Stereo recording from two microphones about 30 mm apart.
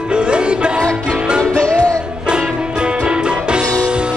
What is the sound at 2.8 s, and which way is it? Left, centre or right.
Music, right.